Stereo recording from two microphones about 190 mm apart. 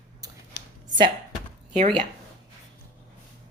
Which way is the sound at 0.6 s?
60° left (ahead or behind).